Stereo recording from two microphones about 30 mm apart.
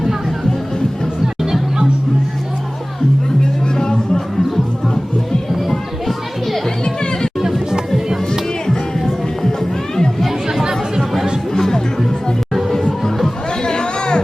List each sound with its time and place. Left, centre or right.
1.4 s music: centre
3.8 s music: left
5.5 s music: centre
6.8 s music: left
9.4 s music: centre
10.2 s chatter: centre
13.6 s a sound: left